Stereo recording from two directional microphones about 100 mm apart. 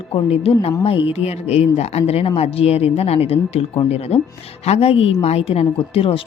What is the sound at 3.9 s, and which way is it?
Speech, 90° left.